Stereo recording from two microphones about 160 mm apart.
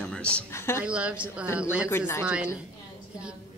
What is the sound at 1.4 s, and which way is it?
Speech, 15° left (ahead or behind).